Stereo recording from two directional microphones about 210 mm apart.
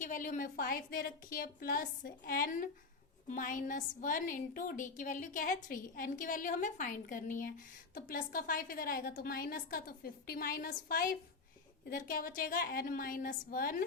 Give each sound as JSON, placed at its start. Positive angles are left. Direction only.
{"t": 0.0, "sound": "a woman's voice", "side_deg": 40}